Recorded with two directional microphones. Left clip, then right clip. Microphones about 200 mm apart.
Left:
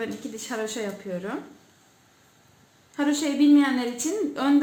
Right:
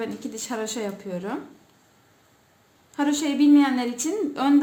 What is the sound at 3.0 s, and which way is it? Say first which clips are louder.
Speech: right 1 dB; 25° right (ahead or behind).